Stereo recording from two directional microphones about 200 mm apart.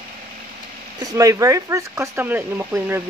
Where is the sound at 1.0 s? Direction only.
15° right (ahead or behind).